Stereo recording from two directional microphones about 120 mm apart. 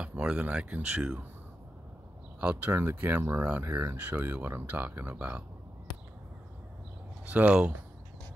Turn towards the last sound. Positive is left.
turn(degrees=-10)  # may be behind; listen again after turning